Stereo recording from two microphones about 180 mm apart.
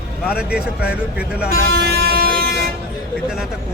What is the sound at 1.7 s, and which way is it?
Vehicle, 65° right (ahead or behind).